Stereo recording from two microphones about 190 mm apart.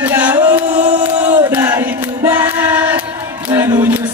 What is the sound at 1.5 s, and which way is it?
Choir, 15° right (ahead or behind).